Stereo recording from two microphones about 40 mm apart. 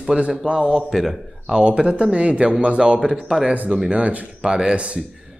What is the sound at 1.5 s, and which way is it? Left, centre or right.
Speech, right.